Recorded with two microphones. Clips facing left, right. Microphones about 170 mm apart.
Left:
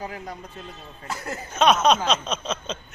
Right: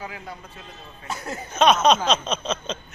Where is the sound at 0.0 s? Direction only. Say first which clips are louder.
Left 2 dB; 40° left (ahead or behind).